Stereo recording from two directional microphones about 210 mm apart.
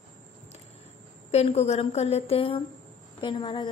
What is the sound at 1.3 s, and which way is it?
A woman's voice, 30° left (ahead or behind).